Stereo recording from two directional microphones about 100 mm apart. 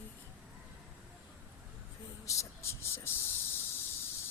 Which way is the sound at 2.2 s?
30° left (ahead or behind).